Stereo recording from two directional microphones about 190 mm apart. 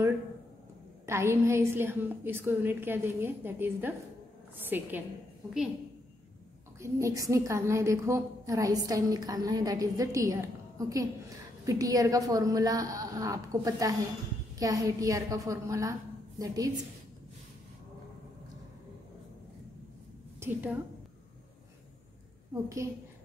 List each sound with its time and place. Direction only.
1.0 s a woman's voice: 15° right (ahead or behind)
6.8 s a woman's voice: 15° right (ahead or behind)
20.3 s a woman's voice: 10° right (ahead or behind)